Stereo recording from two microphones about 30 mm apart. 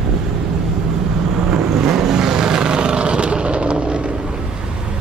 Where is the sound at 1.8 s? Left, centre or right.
Centre; by 4.0 s right.